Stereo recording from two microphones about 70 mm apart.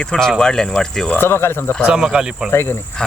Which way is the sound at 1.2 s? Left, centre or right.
Left.